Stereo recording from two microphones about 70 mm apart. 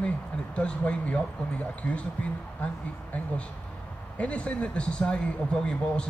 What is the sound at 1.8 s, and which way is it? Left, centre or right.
Speech, centre.